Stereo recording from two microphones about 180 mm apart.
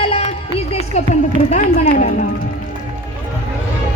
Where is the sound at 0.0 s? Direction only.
30° left (ahead or behind).